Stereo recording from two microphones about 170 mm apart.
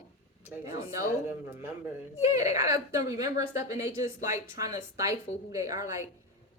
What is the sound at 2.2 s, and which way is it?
Speech, 20° right (ahead or behind).